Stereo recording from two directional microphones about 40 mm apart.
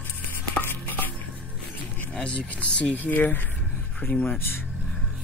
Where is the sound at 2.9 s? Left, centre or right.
Left.